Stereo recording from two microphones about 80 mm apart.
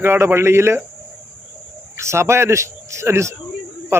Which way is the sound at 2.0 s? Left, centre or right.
Right.